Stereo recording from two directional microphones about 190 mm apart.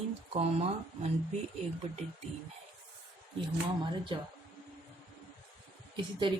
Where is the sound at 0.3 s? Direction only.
35° right (ahead or behind).